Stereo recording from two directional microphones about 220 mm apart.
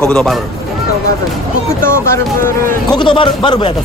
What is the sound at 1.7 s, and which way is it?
Speech, 10° left (ahead or behind).